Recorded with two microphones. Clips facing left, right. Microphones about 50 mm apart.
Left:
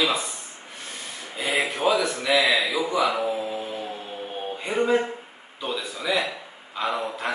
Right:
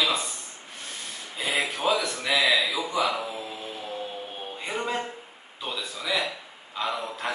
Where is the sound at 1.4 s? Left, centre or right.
Centre.